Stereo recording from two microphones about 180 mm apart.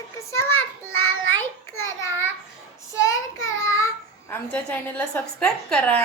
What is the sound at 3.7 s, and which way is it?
Babbling, 15° left (ahead or behind).